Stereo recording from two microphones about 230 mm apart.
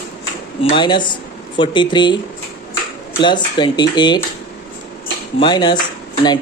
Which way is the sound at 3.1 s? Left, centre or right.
Centre.